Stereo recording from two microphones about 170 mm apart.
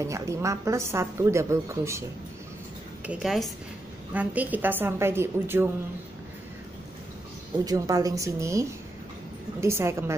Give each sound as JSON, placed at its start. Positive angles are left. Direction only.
{"t": 0.0, "sound": "a woman's voice", "side_deg": -15}
{"t": 3.1, "sound": "a woman's voice", "side_deg": 0}
{"t": 7.6, "sound": "a woman's voice", "side_deg": -20}